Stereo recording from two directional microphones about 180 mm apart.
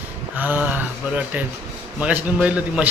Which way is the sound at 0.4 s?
10° right (ahead or behind).